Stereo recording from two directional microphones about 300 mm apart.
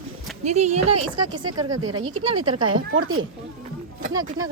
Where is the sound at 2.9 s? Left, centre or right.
Right.